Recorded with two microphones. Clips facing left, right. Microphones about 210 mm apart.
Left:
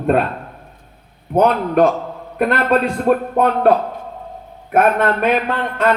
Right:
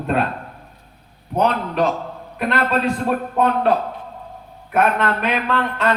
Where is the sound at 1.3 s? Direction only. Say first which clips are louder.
Left 5 dB; 50° left (ahead or behind).